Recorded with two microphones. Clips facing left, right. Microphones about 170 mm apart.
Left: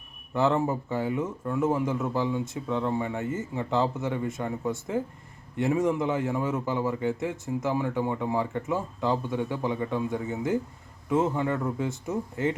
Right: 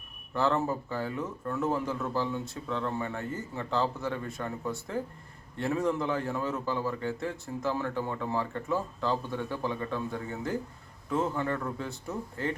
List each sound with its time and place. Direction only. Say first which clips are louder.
0.3 s a man's voice: left 3 dB; 20° left (ahead or behind)